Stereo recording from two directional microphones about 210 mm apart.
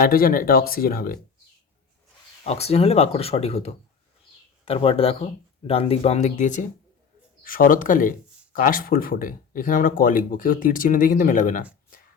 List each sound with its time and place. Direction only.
0.0 s speech: 45° left (ahead or behind)
2.4 s speech: 30° left (ahead or behind)